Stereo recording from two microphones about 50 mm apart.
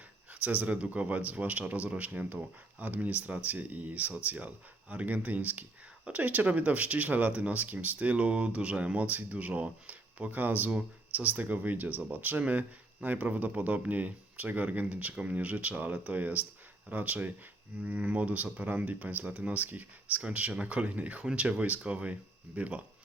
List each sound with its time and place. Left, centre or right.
0.4 s speech: right